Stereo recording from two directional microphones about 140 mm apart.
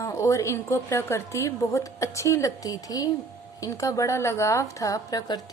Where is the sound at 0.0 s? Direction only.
20° left (ahead or behind).